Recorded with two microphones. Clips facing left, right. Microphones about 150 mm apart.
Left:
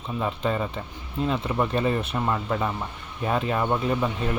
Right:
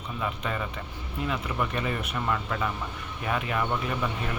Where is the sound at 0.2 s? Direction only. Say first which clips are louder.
Left 6 dB; 30° left (ahead or behind).